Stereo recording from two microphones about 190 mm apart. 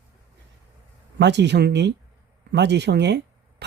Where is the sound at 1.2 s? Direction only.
65° right (ahead or behind).